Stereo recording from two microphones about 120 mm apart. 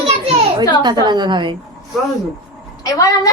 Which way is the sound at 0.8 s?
35° right (ahead or behind).